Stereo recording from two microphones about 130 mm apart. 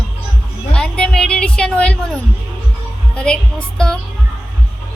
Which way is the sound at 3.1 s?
10° left (ahead or behind).